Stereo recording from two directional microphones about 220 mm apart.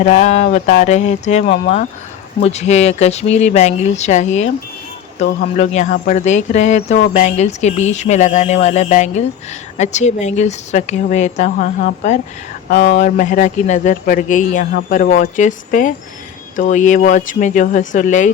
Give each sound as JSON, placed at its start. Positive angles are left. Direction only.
{"t": 0.0, "sound": "a man's voice", "side_deg": 35}
{"t": 5.5, "sound": "a man's voice", "side_deg": 30}